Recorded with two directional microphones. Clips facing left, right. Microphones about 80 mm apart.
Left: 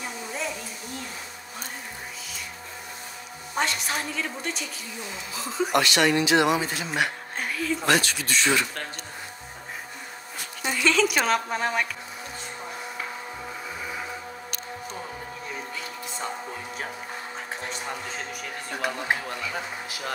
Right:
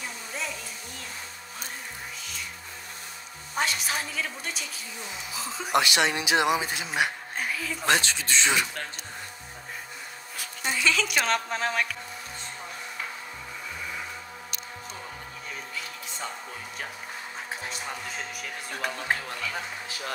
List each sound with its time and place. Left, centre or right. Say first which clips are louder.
3.5 s a woman's voice: left 1 dB; centre
5.7 s speech: left 1 dB; centre
7.3 s music: left 3 dB; centre
7.8 s speech: even; right
10.4 s speech: left 2 dB; centre
18.9 s speech: left 2 dB; centre